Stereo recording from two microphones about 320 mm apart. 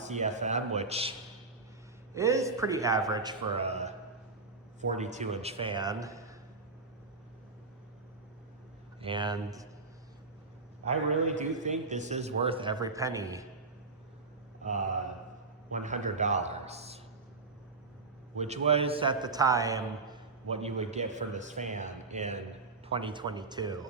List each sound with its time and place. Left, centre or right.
0.1 s a man's voice: right
2.1 s a man's voice: centre
9.0 s a man's voice: centre
11.3 s a man's voice: right
14.6 s mantra: right
15.7 s a man's voice: right
18.3 s a man's voice: right